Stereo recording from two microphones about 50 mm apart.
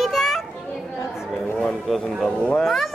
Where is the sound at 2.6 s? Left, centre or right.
Centre.